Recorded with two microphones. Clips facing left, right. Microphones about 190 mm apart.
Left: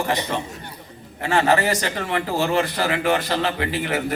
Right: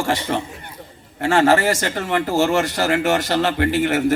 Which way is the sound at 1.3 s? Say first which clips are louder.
Right 3 dB; 50° right (ahead or behind).